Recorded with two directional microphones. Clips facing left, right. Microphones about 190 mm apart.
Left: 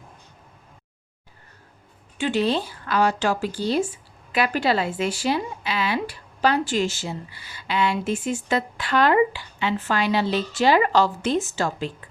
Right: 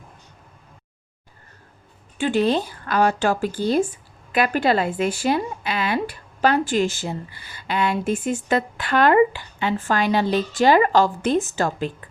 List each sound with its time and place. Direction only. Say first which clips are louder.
2.1 s speech: right 3 dB; 50° right (ahead or behind)